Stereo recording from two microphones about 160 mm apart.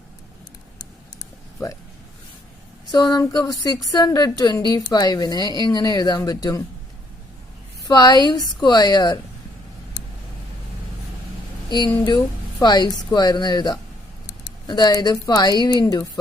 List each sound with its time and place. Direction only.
2.9 s a woman's voice: 25° left (ahead or behind)
7.9 s a woman's voice: 25° left (ahead or behind)
11.7 s a woman's voice: 25° left (ahead or behind)